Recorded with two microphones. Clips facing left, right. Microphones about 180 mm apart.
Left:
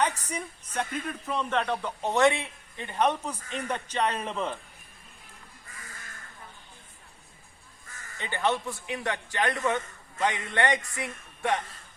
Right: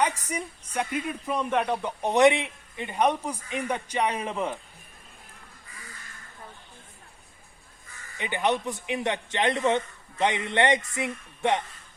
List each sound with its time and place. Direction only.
0.0 s a woman's voice: 10° right (ahead or behind)
8.2 s a man's voice: 15° right (ahead or behind)